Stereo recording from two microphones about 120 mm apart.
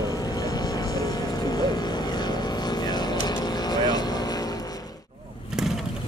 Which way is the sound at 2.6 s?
35° left (ahead or behind).